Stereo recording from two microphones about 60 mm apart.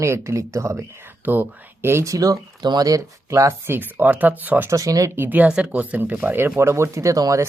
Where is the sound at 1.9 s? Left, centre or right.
Right.